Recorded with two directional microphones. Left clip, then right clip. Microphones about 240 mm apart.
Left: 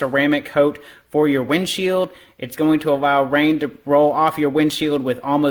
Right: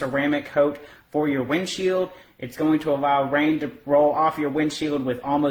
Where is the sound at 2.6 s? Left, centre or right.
Left.